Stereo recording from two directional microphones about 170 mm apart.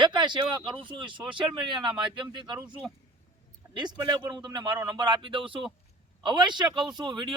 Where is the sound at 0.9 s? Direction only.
30° right (ahead or behind).